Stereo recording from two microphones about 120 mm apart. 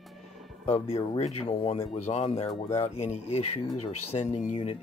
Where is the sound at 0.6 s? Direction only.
65° left (ahead or behind).